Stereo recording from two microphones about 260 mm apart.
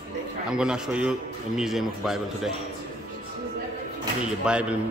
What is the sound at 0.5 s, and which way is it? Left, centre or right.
A man's voice, centre.